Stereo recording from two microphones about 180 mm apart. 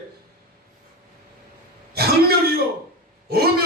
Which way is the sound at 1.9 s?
60° right (ahead or behind).